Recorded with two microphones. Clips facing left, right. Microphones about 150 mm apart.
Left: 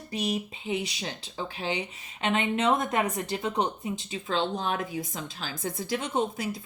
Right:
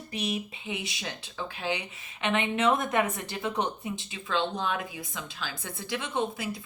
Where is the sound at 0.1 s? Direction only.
40° left (ahead or behind).